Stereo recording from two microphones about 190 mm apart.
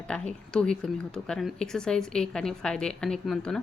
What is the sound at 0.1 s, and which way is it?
Speech, 5° left (ahead or behind).